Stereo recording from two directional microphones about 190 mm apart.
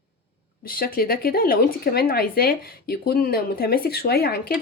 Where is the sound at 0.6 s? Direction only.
50° left (ahead or behind).